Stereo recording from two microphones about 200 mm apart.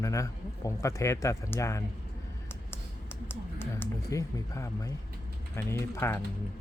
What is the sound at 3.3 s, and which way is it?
Speech, 10° left (ahead or behind).